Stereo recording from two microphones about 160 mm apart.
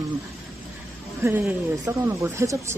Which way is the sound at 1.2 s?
15° right (ahead or behind).